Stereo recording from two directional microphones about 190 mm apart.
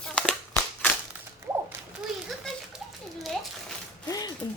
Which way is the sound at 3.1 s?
Centre (ahead or behind).